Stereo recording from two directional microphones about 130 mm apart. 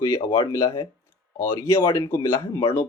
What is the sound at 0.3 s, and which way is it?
Speech, 30° left (ahead or behind).